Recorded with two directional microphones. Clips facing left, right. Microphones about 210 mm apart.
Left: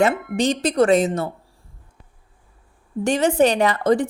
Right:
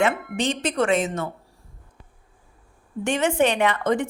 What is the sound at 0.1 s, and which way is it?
Speech, centre (ahead or behind).